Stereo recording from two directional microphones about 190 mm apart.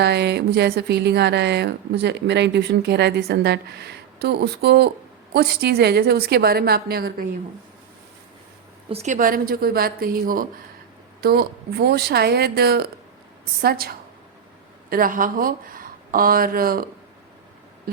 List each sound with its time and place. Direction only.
0.0 s speech: 60° right (ahead or behind)
8.9 s a woman's voice: 35° right (ahead or behind); by 18.0 s 50° right (ahead or behind)